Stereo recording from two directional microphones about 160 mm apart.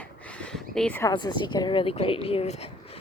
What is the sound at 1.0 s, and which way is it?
A woman's voice, 25° left (ahead or behind).